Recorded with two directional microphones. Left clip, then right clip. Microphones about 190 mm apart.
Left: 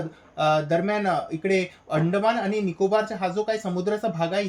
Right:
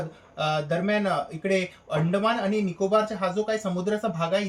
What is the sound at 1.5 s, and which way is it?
Speech, 30° left (ahead or behind).